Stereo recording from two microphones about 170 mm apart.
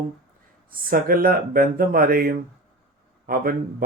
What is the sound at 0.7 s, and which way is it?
Speech, 55° right (ahead or behind).